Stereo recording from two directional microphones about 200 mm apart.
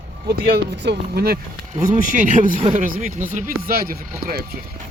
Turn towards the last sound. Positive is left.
turn(degrees=-50)  # may be behind; listen again after turning